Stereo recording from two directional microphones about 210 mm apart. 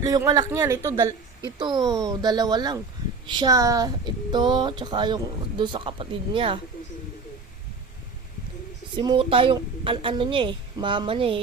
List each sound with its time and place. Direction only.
0.0 s speech: 15° right (ahead or behind)
9.0 s speech: 25° right (ahead or behind)